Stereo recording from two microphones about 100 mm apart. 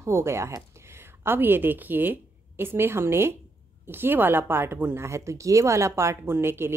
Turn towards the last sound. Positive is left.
turn(degrees=-25)  # may be behind; listen again after turning